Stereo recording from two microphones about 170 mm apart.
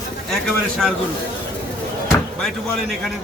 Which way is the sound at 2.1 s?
Centre (ahead or behind).